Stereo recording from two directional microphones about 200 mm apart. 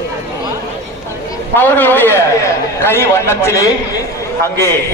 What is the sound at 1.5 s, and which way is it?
A man's voice, 10° left (ahead or behind).